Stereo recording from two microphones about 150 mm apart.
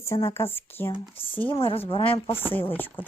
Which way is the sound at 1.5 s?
35° left (ahead or behind).